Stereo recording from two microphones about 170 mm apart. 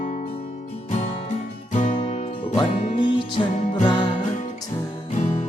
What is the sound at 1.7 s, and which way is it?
Music, 50° left (ahead or behind).